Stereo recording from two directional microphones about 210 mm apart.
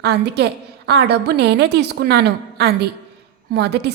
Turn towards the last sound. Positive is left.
turn(degrees=-50)  # may be behind; listen again after turning